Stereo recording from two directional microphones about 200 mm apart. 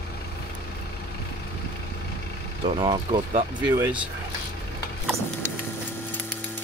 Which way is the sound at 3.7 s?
10° right (ahead or behind).